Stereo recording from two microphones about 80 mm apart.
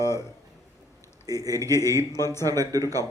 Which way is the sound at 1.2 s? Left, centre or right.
Right.